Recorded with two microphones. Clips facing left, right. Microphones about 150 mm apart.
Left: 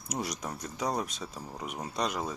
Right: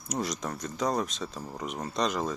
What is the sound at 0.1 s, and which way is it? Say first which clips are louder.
Speech: right 3 dB; 10° left (ahead or behind).